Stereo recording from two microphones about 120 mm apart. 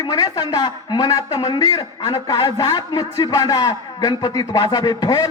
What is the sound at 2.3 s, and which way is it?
Speech, 45° left (ahead or behind).